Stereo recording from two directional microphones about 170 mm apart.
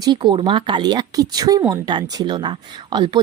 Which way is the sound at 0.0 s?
25° right (ahead or behind).